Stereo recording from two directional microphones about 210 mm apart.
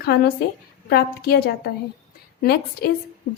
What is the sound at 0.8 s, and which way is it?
A woman's voice, 50° left (ahead or behind).